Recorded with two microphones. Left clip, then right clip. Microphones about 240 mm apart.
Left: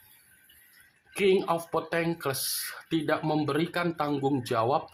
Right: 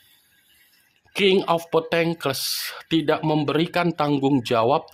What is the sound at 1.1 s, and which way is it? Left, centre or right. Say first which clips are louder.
Speech: right 6 dB; right.